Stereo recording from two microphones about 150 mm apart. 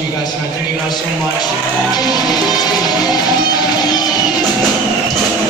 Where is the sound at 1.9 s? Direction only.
25° left (ahead or behind).